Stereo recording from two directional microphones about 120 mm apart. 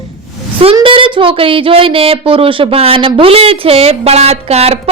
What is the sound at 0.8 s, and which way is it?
Speech, 45° right (ahead or behind).